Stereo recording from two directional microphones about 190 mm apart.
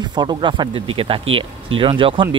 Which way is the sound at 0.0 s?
20° right (ahead or behind).